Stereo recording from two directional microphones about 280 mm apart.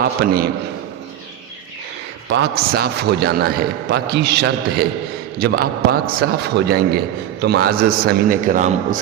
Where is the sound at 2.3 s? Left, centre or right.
Right.